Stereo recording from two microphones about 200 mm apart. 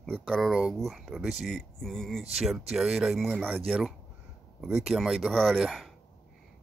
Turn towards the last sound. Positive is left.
turn(degrees=0)  # may be behind; listen again after turning